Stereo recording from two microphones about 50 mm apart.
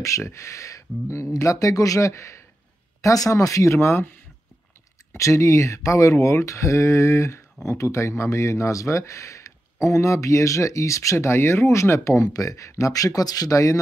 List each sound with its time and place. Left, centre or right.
0.0 s speech: left
5.1 s speech: left
7.6 s speech: left
13.5 s speech: left